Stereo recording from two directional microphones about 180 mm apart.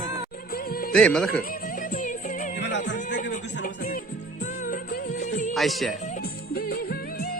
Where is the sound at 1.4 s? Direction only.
50° left (ahead or behind).